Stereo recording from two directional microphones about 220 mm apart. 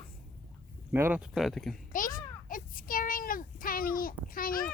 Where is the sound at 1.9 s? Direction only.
40° left (ahead or behind).